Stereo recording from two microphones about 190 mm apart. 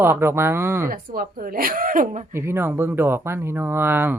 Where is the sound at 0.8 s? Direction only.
50° right (ahead or behind).